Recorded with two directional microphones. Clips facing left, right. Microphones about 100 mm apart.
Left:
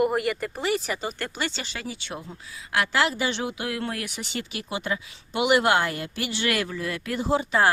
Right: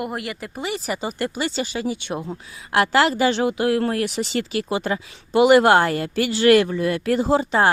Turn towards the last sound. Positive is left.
turn(degrees=-30)  # may be behind; listen again after turning